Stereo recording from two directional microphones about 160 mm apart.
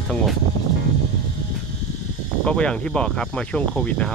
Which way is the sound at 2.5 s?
5° left (ahead or behind).